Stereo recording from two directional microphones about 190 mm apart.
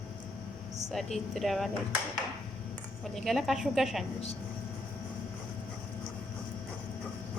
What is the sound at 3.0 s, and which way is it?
A woman's voice, centre (ahead or behind).